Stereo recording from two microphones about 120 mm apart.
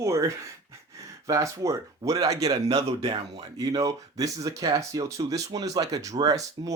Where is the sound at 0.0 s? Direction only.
25° right (ahead or behind).